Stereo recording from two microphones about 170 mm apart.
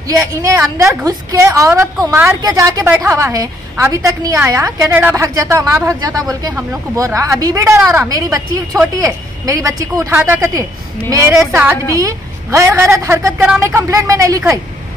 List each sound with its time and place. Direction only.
0.1 s a woman's voice: 20° right (ahead or behind)